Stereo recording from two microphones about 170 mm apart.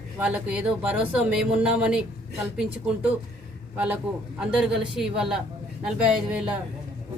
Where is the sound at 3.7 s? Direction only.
10° right (ahead or behind).